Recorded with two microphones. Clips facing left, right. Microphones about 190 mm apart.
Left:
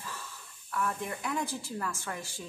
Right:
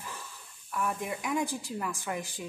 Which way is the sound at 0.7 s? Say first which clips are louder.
Right 1 dB; 15° right (ahead or behind).